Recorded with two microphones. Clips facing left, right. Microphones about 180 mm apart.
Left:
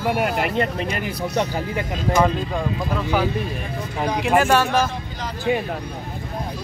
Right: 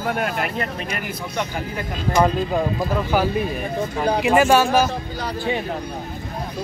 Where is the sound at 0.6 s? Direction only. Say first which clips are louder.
Left 4 dB; 30° left (ahead or behind).